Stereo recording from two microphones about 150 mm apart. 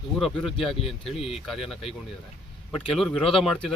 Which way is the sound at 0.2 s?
Centre (ahead or behind).